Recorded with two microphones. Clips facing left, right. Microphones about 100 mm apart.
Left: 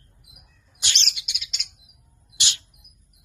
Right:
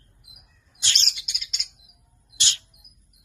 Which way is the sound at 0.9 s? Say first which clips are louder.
Even; 40° right (ahead or behind).